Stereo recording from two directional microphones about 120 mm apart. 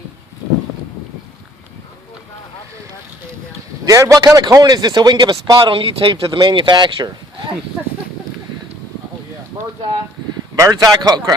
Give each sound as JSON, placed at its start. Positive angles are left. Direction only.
{"t": 3.8, "sound": "a man's voice", "side_deg": -25}
{"t": 10.5, "sound": "a man's voice", "side_deg": -30}